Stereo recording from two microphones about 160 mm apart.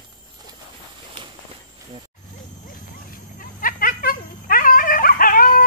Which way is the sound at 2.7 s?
60° left (ahead or behind).